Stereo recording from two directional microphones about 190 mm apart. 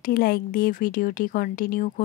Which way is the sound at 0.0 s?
50° left (ahead or behind).